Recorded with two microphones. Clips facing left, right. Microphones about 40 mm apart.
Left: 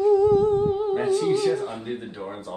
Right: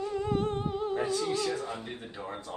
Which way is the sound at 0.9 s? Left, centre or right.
Left.